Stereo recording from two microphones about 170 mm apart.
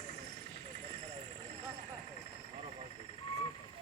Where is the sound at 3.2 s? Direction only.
30° left (ahead or behind).